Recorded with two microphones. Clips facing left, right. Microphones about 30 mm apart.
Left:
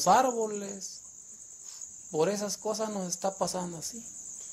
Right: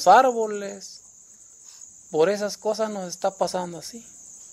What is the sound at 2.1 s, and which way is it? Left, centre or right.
Speech, right.